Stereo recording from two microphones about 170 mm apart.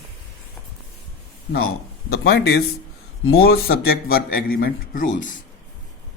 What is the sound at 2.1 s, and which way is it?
Speech, 75° left (ahead or behind).